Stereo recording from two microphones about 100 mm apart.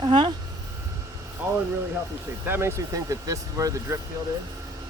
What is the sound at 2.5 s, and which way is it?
Speech, 25° right (ahead or behind).